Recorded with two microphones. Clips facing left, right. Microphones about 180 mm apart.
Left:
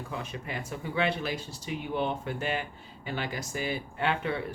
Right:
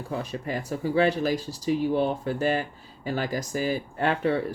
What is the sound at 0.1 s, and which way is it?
Speech, 40° right (ahead or behind).